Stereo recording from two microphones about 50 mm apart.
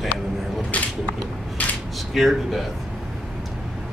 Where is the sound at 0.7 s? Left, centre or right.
Left.